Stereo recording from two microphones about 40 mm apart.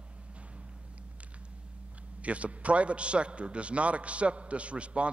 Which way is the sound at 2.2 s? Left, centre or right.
Right.